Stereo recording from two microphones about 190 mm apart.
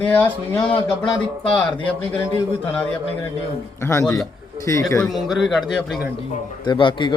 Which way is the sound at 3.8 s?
15° left (ahead or behind).